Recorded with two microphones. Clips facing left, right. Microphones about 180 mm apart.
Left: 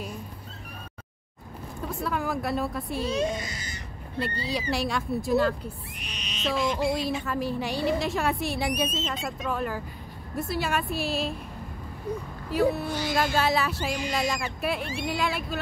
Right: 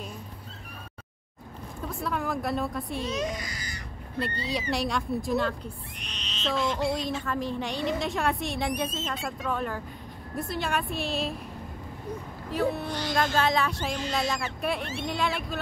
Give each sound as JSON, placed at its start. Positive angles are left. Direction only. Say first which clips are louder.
{"t": 1.9, "sound": "a woman's voice", "louder": "left 1 dB", "side_deg": 0}
{"t": 3.1, "sound": "a child's voice", "louder": "left 3 dB", "side_deg": 30}
{"t": 4.5, "sound": "a woman's voice", "louder": "left 1 dB", "side_deg": 0}
{"t": 9.0, "sound": "speech", "louder": "left 1 dB", "side_deg": 20}
{"t": 9.5, "sound": "a woman's voice", "louder": "left 1 dB", "side_deg": 5}
{"t": 12.4, "sound": "a woman's voice", "louder": "left 3 dB", "side_deg": 5}